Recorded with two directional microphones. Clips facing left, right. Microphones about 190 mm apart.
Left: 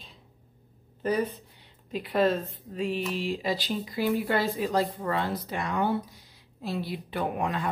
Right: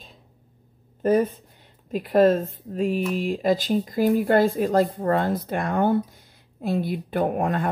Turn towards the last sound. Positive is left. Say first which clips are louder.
# right 6 dB
turn(degrees=-50)  # may be behind; listen again after turning